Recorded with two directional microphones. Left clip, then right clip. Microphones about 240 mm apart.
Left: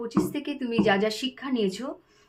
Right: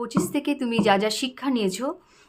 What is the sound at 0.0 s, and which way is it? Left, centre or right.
Speech, right.